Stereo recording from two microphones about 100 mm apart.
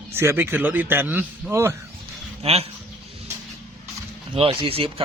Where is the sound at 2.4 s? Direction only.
85° right.